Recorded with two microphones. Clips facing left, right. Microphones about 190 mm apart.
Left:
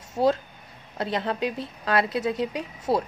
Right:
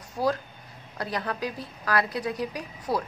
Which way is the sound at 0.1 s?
25° left (ahead or behind).